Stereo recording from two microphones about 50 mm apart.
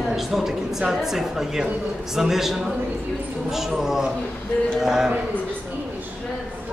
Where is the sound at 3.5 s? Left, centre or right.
Centre.